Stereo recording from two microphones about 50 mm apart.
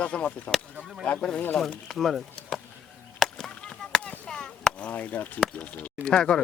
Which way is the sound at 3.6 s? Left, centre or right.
Centre.